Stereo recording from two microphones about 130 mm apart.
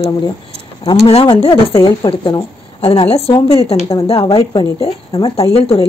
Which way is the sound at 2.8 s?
50° left (ahead or behind).